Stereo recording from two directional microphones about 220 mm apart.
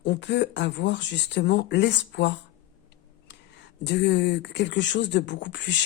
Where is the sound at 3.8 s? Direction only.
50° left (ahead or behind).